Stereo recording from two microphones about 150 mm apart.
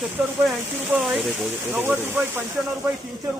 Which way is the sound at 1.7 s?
15° right (ahead or behind).